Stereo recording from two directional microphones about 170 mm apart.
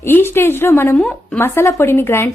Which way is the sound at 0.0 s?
15° left (ahead or behind).